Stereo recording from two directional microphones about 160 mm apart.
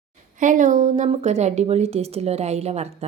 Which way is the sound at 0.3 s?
55° right (ahead or behind).